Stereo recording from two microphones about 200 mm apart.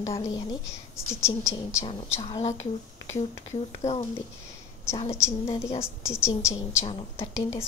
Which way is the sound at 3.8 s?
15° left (ahead or behind).